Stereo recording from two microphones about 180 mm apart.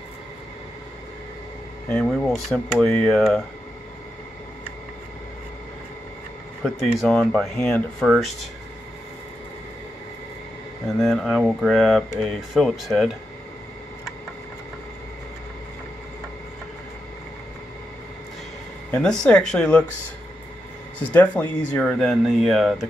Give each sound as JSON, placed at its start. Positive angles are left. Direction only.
{"t": 1.9, "sound": "speech", "side_deg": 5}
{"t": 6.6, "sound": "speech", "side_deg": 0}
{"t": 11.0, "sound": "speech", "side_deg": 0}
{"t": 18.9, "sound": "speech", "side_deg": 5}
{"t": 21.0, "sound": "speech", "side_deg": 10}